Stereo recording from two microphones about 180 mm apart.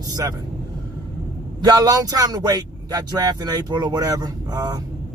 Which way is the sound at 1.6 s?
20° right (ahead or behind).